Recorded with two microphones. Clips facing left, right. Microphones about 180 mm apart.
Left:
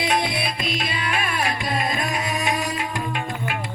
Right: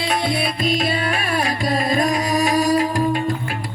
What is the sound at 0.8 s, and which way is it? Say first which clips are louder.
Music: right 5 dB; 40° right (ahead or behind).